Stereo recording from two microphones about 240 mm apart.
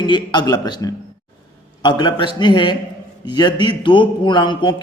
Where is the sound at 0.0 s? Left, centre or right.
Centre.